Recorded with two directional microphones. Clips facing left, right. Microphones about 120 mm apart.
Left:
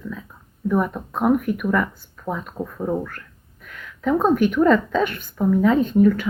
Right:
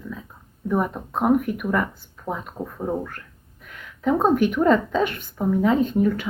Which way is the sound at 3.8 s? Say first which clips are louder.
Left 1 dB; 25° right (ahead or behind).